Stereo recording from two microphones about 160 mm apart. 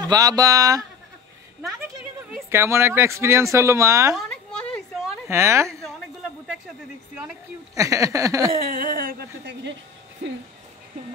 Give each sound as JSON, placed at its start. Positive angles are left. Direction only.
{"t": 0.0, "sound": "speech", "side_deg": -25}
{"t": 2.5, "sound": "speech", "side_deg": -15}
{"t": 5.3, "sound": "speech", "side_deg": -15}
{"t": 7.7, "sound": "speech", "side_deg": -20}
{"t": 8.6, "sound": "speech", "side_deg": -60}